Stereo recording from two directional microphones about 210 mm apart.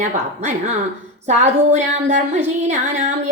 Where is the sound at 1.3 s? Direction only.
35° right (ahead or behind).